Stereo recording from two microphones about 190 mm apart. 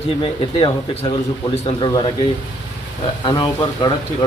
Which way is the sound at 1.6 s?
20° left (ahead or behind).